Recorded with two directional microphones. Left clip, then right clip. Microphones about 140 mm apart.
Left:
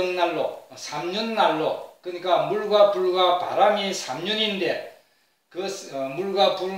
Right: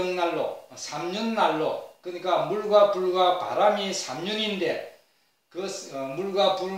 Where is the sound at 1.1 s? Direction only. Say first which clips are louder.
Left 3 dB; 20° right (ahead or behind).